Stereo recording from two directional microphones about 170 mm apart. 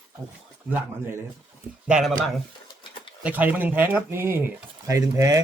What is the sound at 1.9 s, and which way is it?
Speech, centre (ahead or behind).